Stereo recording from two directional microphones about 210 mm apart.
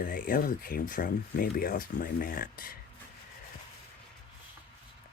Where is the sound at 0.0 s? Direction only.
40° left (ahead or behind).